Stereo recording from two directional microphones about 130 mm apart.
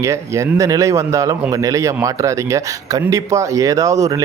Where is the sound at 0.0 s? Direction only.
20° right (ahead or behind).